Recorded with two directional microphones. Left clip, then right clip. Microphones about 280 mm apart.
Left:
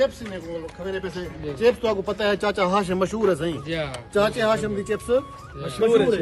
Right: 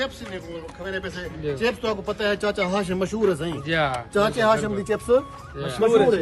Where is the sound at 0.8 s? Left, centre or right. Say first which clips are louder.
Right 1 dB; centre.